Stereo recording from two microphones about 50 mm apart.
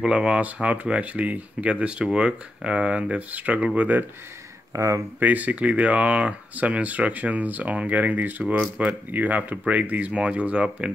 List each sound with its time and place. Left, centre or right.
0.0 s speech: centre
4.7 s speech: right
5.2 s speech: right